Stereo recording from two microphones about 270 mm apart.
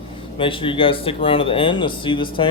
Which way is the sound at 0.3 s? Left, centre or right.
Centre.